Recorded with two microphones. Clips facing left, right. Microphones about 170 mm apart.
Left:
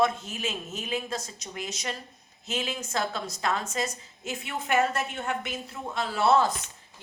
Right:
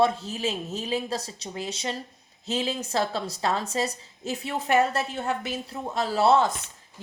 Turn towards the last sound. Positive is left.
turn(degrees=-25)  # may be behind; listen again after turning